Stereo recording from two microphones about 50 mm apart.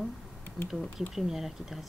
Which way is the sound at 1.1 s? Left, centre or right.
Centre.